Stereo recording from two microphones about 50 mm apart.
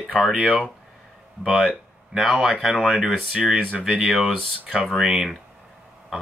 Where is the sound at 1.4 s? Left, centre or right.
Centre.